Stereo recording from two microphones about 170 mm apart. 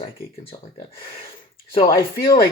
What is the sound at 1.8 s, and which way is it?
Speech, 60° left (ahead or behind).